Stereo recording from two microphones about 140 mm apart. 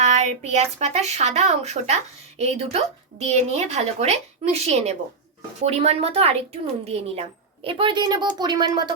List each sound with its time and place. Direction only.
0.0 s a woman's voice: 55° right (ahead or behind); by 8.9 s 30° right (ahead or behind)